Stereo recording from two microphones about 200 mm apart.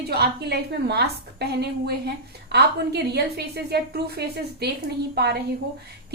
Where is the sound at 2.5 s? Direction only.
55° right (ahead or behind).